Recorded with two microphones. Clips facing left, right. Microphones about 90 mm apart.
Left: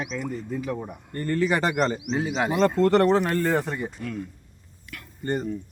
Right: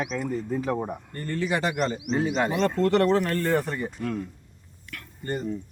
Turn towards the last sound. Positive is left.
turn(degrees=30)  # may be behind; listen again after turning